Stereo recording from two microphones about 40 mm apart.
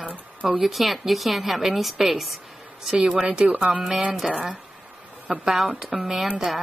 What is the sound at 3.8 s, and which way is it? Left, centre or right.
Speech, centre.